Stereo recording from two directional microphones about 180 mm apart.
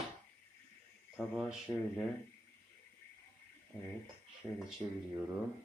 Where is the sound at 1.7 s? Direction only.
15° left (ahead or behind).